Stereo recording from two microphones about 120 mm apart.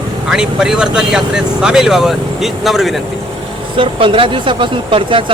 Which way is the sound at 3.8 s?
45° right (ahead or behind).